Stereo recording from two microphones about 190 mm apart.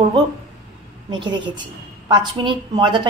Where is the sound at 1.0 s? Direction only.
25° right (ahead or behind).